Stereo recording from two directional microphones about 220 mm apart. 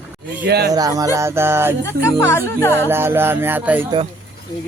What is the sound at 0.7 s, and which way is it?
Music, 15° right (ahead or behind).